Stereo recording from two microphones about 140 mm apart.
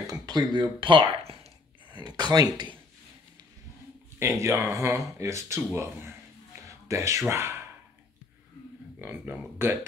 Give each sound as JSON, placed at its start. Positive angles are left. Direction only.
{"t": 0.0, "sound": "speech", "side_deg": -25}
{"t": 2.0, "sound": "speech", "side_deg": -30}
{"t": 4.2, "sound": "speech", "side_deg": -20}
{"t": 9.0, "sound": "speech", "side_deg": -15}